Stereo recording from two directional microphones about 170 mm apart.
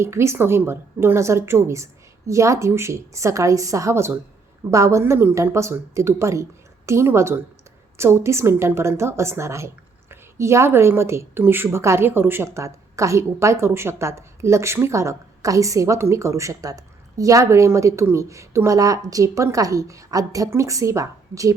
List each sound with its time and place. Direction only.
0.0 s a woman's voice: 15° right (ahead or behind)